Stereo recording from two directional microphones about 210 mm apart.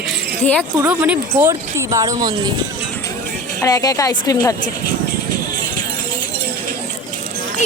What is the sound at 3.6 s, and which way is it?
Speech, 15° left (ahead or behind).